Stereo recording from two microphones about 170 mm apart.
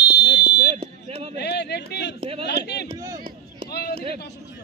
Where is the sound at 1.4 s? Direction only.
75° left (ahead or behind).